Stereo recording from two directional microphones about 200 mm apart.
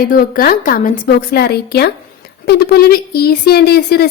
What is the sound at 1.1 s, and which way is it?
A woman's voice, 55° left (ahead or behind).